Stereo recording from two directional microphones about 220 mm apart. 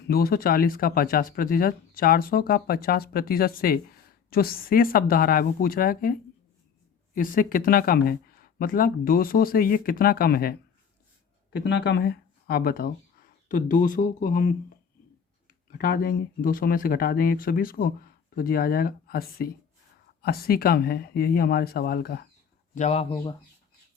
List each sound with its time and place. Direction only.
0.1 s speech: 45° left (ahead or behind)
11.5 s speech: 50° left (ahead or behind)
15.7 s speech: 40° left (ahead or behind)
22.7 s speech: 30° left (ahead or behind)